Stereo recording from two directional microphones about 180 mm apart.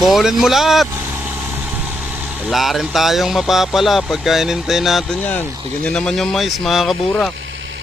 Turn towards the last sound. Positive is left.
turn(degrees=0)  # may be behind; listen again after turning